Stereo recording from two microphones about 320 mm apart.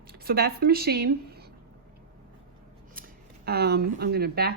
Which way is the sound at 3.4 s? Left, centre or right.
Right.